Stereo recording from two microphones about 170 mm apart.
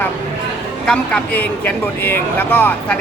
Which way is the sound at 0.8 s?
5° left (ahead or behind).